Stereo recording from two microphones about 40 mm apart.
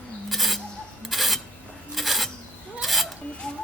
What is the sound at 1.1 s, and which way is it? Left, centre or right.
Rub, centre.